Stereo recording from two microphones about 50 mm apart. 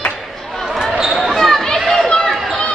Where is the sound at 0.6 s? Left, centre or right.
Centre.